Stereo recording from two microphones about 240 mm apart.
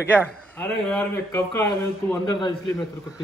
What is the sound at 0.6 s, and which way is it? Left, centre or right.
Speech, centre.